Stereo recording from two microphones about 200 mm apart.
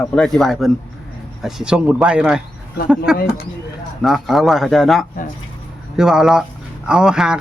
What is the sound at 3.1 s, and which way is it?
Speech, 50° left (ahead or behind).